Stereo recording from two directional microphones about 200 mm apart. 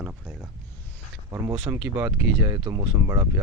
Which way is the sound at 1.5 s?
5° right (ahead or behind).